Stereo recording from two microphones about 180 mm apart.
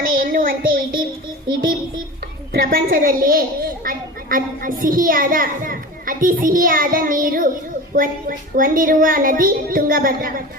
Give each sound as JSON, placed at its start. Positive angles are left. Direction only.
{"t": 0.0, "sound": "child singing", "side_deg": -50}
{"t": 2.5, "sound": "a woman's voice", "side_deg": -55}